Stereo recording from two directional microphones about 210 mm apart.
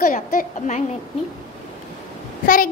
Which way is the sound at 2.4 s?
40° left (ahead or behind).